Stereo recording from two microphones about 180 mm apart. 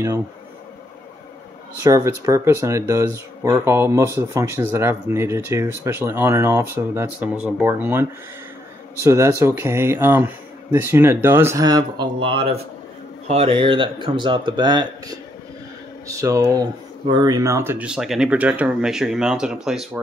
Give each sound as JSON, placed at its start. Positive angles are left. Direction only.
{"t": 1.8, "sound": "speech", "side_deg": -15}